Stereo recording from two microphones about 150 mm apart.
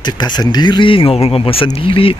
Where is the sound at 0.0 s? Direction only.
30° left (ahead or behind).